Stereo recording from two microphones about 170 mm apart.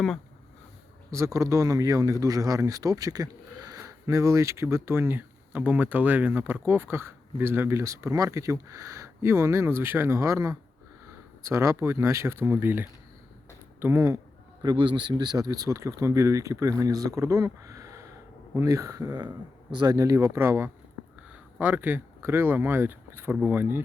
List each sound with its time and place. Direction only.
1.1 s speech: 20° right (ahead or behind)
14.6 s speech: 25° right (ahead or behind)